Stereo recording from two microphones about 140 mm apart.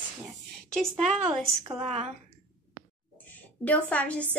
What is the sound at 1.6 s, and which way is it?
Speech, 45° right (ahead or behind).